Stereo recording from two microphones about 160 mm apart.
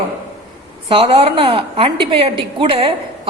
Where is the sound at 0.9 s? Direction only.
35° right (ahead or behind).